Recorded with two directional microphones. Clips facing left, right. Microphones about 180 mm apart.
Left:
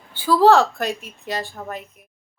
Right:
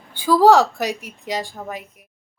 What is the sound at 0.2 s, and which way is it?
Speech, 15° right (ahead or behind).